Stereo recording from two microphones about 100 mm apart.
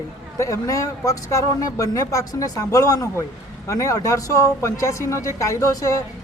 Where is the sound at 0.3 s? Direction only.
30° left (ahead or behind).